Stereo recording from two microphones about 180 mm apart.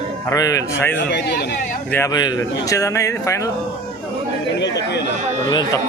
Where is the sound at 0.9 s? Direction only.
70° left (ahead or behind).